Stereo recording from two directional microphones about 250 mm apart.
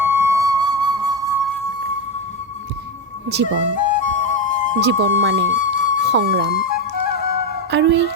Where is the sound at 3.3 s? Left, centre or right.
Right.